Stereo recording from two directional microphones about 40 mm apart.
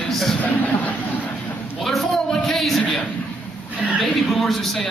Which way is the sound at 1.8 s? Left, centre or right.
Centre.